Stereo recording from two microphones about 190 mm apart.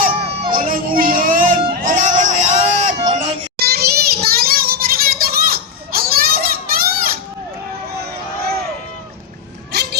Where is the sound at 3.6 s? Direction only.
55° right (ahead or behind).